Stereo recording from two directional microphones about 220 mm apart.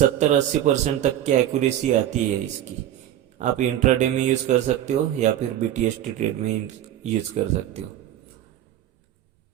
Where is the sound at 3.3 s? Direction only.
35° right (ahead or behind).